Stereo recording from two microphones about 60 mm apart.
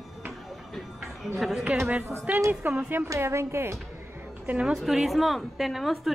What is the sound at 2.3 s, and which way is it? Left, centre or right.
Speech, right.